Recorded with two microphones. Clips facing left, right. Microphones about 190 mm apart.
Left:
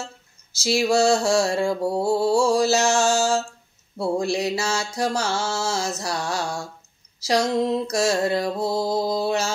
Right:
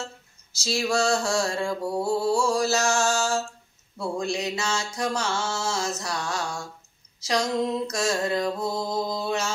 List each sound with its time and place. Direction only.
0.7 s mantra: 25° left (ahead or behind)
4.0 s music: 35° left (ahead or behind)